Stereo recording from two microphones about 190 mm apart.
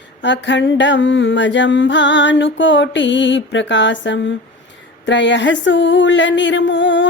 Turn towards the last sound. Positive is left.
turn(degrees=75)  # may be behind; listen again after turning